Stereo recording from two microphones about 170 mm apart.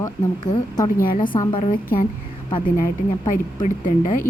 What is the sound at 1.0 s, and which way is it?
Speech, 55° left (ahead or behind).